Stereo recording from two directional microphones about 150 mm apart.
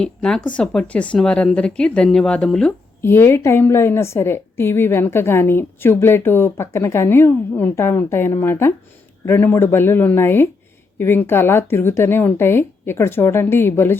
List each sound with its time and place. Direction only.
0.0 s speech: 5° left (ahead or behind)
3.0 s a woman's voice: 15° left (ahead or behind)